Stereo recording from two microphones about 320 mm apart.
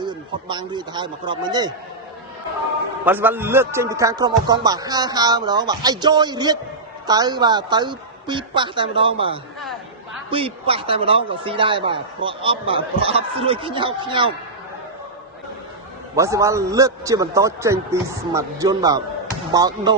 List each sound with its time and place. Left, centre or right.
0.0 s speech: centre
3.0 s speech: centre
16.1 s speech: centre